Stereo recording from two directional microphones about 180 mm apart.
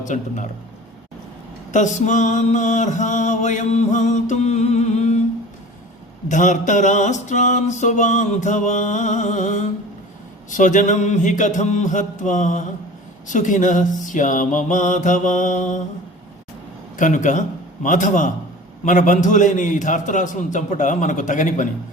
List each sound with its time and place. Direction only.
0.1 s mantra: 45° left (ahead or behind)
1.7 s mantra: 40° left (ahead or behind)
6.2 s mantra: 45° left (ahead or behind)
17.0 s mantra: 45° left (ahead or behind)